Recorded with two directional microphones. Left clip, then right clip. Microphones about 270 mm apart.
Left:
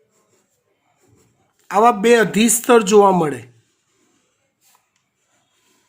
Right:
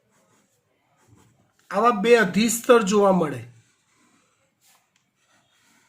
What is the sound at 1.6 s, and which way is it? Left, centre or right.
A man's voice, left.